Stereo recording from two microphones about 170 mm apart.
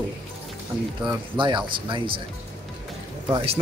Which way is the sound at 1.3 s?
30° right (ahead or behind).